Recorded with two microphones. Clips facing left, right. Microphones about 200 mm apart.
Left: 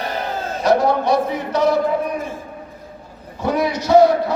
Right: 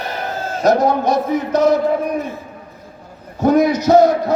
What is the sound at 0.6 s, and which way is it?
A man's voice, 45° right (ahead or behind).